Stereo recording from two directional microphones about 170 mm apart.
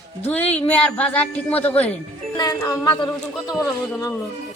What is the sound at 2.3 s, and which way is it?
Speech, 20° left (ahead or behind).